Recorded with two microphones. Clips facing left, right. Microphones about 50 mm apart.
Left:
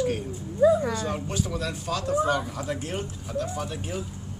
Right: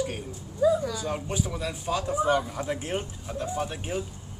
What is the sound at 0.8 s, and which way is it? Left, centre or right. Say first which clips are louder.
Speech: left 3 dB; left.